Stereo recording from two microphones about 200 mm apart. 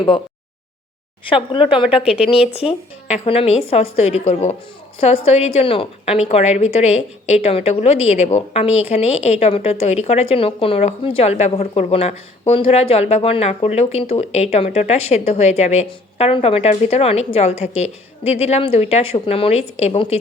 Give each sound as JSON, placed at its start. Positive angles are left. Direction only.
{"t": 1.3, "sound": "a woman's voice", "side_deg": 25}